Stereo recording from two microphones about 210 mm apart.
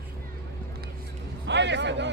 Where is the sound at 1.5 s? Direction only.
55° right (ahead or behind).